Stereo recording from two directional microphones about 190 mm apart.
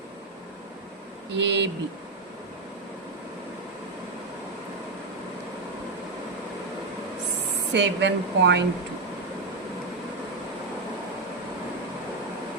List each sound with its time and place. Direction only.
1.3 s speech: 65° right (ahead or behind)
7.7 s speech: 65° right (ahead or behind)